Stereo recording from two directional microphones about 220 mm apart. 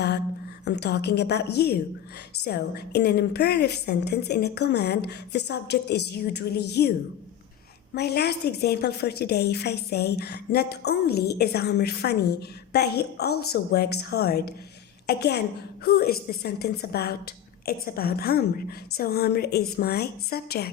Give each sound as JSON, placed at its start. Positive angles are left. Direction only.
{"t": 0.6, "sound": "a woman's voice", "side_deg": 50}
{"t": 7.9, "sound": "a woman's voice", "side_deg": 50}